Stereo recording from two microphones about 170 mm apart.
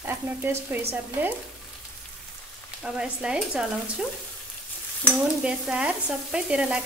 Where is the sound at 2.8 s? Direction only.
5° right (ahead or behind).